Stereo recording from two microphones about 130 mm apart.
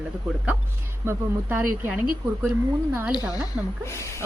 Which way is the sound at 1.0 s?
15° right (ahead or behind).